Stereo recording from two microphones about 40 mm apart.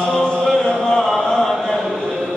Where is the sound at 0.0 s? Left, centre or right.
Centre.